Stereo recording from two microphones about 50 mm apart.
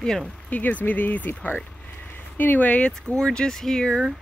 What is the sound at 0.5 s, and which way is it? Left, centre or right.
Speech, left.